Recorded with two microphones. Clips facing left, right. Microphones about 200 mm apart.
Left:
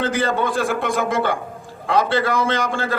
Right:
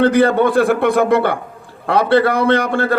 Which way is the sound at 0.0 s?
60° right (ahead or behind).